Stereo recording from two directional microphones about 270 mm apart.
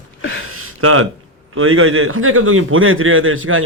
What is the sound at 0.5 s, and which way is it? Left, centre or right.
Gasp, right.